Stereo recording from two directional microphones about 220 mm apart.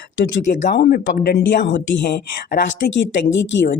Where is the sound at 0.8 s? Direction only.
45° left (ahead or behind).